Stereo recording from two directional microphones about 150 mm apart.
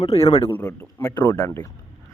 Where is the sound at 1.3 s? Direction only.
25° left (ahead or behind).